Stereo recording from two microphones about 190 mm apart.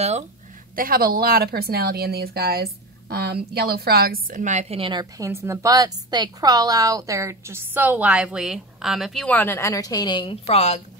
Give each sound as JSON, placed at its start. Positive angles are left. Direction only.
{"t": 0.7, "sound": "speech", "side_deg": -50}